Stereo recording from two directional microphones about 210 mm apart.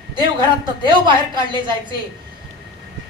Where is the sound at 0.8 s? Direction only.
20° right (ahead or behind).